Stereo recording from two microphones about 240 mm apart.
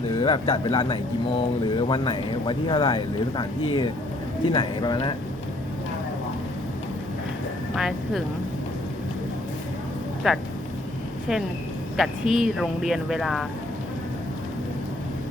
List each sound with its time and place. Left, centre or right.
0.2 s speech: centre
7.8 s speech: centre
10.3 s speech: centre
11.9 s speech: centre